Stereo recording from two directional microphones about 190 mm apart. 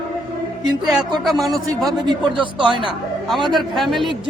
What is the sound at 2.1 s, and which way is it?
Speech, 25° right (ahead or behind).